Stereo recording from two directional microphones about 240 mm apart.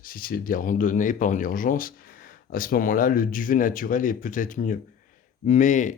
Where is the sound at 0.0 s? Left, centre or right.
Left.